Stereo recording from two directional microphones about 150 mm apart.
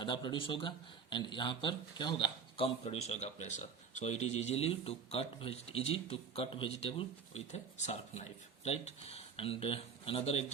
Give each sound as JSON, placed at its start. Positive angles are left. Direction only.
{"t": 0.0, "sound": "speech", "side_deg": 30}